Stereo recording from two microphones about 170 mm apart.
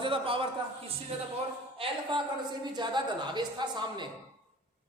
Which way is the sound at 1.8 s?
25° right (ahead or behind).